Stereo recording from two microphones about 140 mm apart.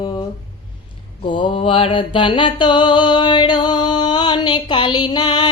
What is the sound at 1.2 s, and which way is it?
Mantra, 35° left (ahead or behind).